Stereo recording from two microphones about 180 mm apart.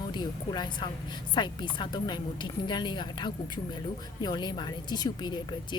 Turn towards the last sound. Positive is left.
turn(degrees=25)  # may be behind; listen again after turning